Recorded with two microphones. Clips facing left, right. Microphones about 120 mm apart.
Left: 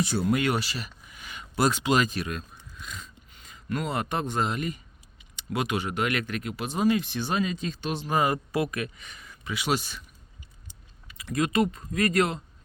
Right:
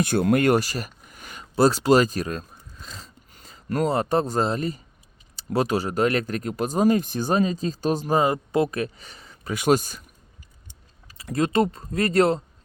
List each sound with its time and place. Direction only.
0.0 s speech: 55° right (ahead or behind)
8.1 s speech: 25° right (ahead or behind)
9.5 s speech: 45° right (ahead or behind)
11.1 s speech: 35° right (ahead or behind)